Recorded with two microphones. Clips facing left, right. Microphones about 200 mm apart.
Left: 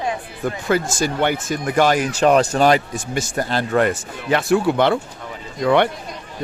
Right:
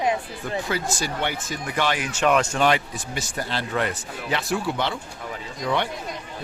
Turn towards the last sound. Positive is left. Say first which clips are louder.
# left 9 dB
turn(degrees=65)  # may be behind; listen again after turning